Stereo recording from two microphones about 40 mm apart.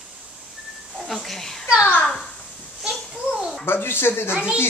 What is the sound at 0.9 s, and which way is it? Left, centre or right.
Speech, centre.